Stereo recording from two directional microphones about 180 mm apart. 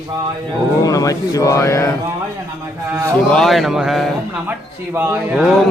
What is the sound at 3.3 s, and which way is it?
Speech, centre (ahead or behind).